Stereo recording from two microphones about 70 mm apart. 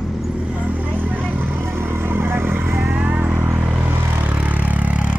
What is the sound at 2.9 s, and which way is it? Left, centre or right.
Vehicle, right.